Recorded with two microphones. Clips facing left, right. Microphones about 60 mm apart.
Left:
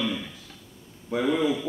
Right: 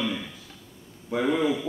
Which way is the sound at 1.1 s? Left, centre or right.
Centre.